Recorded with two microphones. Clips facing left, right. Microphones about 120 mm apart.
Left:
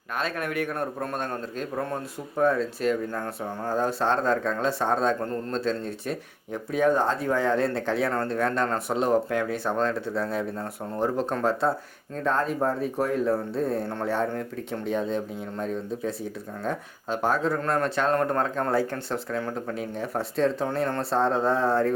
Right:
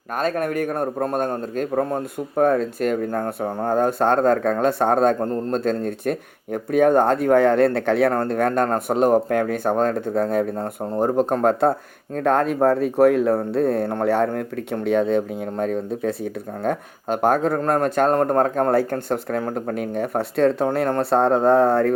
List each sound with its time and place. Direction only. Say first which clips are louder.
0.1 s speech: right 7 dB; 45° right (ahead or behind)
12.1 s speech: right 7 dB; 65° right (ahead or behind)